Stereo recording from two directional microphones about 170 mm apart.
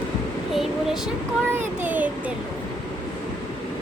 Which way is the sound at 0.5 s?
Centre (ahead or behind).